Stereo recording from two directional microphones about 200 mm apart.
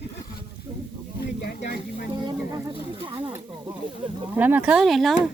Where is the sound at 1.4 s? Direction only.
55° left (ahead or behind).